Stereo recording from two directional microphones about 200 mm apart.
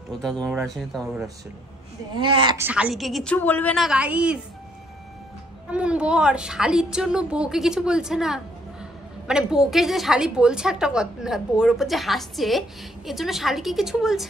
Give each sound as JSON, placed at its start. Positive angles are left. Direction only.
{"t": 0.2, "sound": "a woman's voice", "side_deg": 0}
{"t": 2.1, "sound": "speech", "side_deg": -25}
{"t": 2.6, "sound": "a woman's voice", "side_deg": -5}
{"t": 5.7, "sound": "a woman's voice", "side_deg": -5}